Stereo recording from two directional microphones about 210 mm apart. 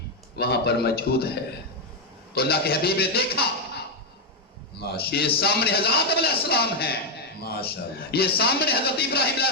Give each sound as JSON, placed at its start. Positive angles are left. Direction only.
{"t": 0.3, "sound": "a man's voice", "side_deg": 50}
{"t": 2.3, "sound": "a man's voice", "side_deg": 50}
{"t": 4.8, "sound": "a man's voice", "side_deg": 50}